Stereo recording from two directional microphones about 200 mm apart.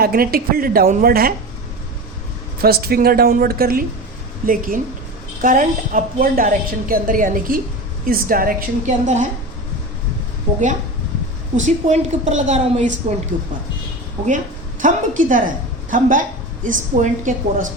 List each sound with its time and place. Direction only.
0.0 s a woman's voice: 50° right (ahead or behind)
2.6 s a woman's voice: 50° right (ahead or behind)
11.5 s a woman's voice: 35° right (ahead or behind)